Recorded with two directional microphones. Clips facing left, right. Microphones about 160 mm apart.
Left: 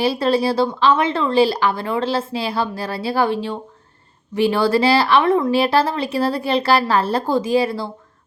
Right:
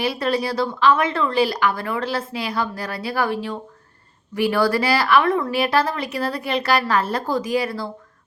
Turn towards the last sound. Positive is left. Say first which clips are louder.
# left 4 dB
turn(degrees=30)  # may be behind; listen again after turning